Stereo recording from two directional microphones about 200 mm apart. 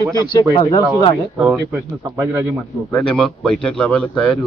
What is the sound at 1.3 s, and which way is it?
Speech, 5° right (ahead or behind).